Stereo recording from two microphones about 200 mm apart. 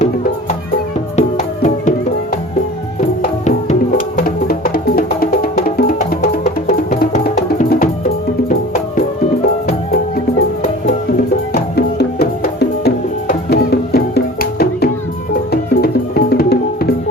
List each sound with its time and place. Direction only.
1.1 s music: 35° left (ahead or behind)
4.4 s music: 50° left (ahead or behind)
11.8 s music: 50° left (ahead or behind)